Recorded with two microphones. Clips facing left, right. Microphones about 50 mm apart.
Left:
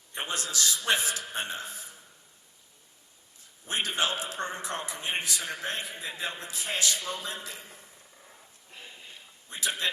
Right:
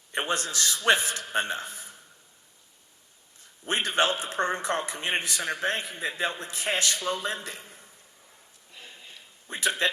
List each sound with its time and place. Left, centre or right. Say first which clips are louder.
0.2 s a man's voice: right 4 dB; right
3.7 s a man's voice: right 4 dB; right
9.5 s a man's voice: right 5 dB; right